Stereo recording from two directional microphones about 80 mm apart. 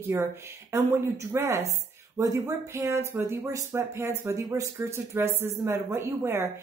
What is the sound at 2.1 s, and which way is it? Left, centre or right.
Speech, right.